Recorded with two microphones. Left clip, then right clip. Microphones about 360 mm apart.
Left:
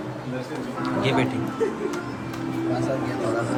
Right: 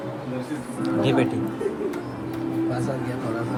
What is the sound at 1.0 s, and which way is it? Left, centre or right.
Speech, centre.